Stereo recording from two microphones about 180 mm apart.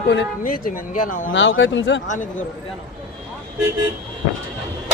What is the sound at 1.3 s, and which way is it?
Speech, 90° left.